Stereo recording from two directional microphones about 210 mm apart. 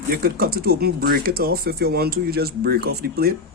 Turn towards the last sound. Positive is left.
turn(degrees=-45)  # may be behind; listen again after turning